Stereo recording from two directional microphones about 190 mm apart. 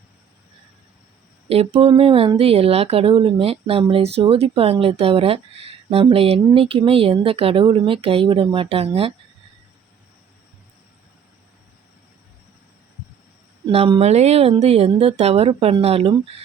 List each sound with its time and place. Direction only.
1.5 s speech: 30° right (ahead or behind)
13.7 s speech: 30° right (ahead or behind)